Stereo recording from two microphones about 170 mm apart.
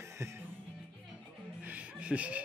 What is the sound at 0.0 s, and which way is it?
Music, 15° right (ahead or behind).